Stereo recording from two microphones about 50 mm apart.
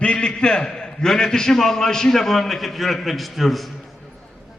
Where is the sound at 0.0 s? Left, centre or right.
Left; by 3.6 s centre.